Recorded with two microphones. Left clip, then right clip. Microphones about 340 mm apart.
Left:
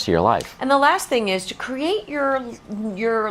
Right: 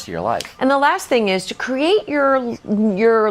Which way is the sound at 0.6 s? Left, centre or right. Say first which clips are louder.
Right 2 dB; right.